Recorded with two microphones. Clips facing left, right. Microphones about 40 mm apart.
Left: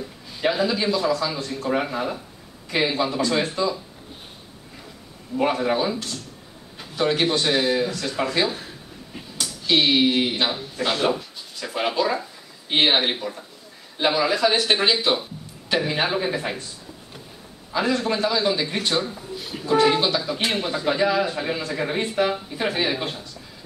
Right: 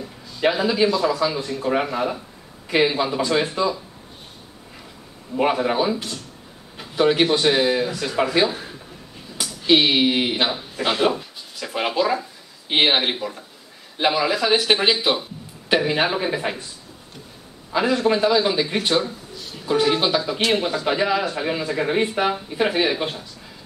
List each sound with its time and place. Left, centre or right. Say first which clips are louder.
0.4 s speech: right 3 dB; centre
5.3 s a man's voice: right 1 dB; centre
17.7 s speech: right 4 dB; centre
19.3 s a sound: left 4 dB; left
19.6 s a man's voice: left 1 dB; centre
20.8 s speech: even; centre